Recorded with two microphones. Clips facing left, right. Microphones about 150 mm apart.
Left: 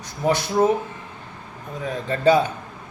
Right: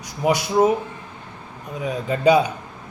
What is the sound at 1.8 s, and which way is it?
Speech, 15° right (ahead or behind).